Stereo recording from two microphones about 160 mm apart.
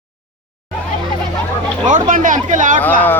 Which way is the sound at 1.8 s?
55° right (ahead or behind).